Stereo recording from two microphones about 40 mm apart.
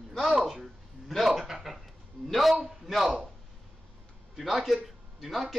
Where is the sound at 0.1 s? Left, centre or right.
Centre.